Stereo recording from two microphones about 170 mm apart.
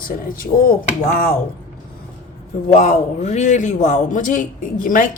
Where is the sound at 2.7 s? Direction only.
45° left (ahead or behind).